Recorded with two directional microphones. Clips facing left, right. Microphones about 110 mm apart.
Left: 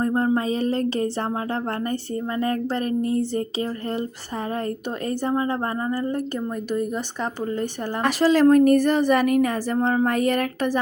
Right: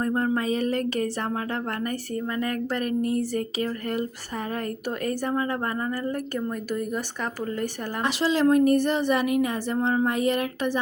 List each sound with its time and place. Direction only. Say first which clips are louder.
0.0 s speech: left 3 dB; 30° left (ahead or behind)
5.0 s speech: left 3 dB; 25° left (ahead or behind)
8.0 s a woman's voice: left 5 dB; 45° left (ahead or behind)